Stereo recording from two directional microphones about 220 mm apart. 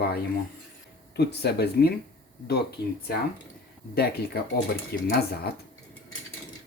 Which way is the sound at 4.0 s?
45° left (ahead or behind).